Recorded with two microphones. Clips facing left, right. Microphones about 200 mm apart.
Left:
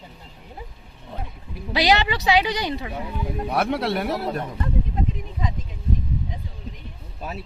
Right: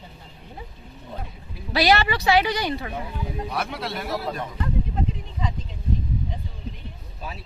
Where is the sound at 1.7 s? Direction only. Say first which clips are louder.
Even; 15° left (ahead or behind).